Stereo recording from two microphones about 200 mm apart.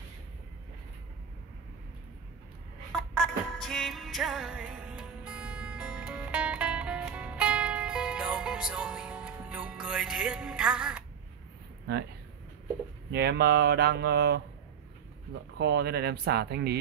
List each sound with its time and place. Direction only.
2.9 s music: centre (ahead or behind)
13.1 s speech: 55° right (ahead or behind)
15.5 s speech: 55° right (ahead or behind)